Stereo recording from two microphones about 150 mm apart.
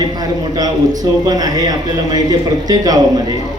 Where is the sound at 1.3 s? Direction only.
25° right (ahead or behind).